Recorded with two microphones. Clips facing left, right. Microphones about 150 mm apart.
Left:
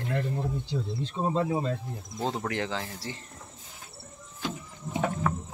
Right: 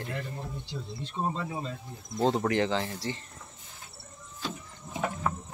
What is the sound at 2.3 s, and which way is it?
Speech, centre (ahead or behind).